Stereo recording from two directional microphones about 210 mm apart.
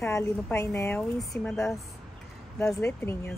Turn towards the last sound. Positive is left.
turn(degrees=10)  # may be behind; listen again after turning